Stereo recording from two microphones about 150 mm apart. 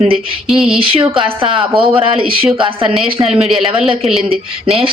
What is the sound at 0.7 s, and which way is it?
A woman's voice, 40° right (ahead or behind).